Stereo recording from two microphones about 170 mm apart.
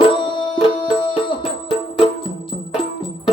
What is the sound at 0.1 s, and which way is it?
Music, 30° left (ahead or behind).